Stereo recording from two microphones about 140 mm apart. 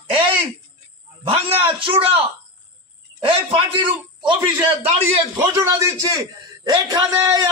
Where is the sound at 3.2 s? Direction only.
40° right (ahead or behind).